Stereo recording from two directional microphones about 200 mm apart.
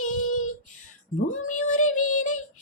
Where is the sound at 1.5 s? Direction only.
35° left (ahead or behind).